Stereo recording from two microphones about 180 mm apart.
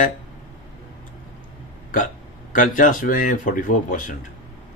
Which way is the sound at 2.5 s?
45° left (ahead or behind).